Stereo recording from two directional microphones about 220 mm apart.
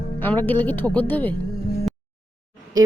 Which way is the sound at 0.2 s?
10° left (ahead or behind).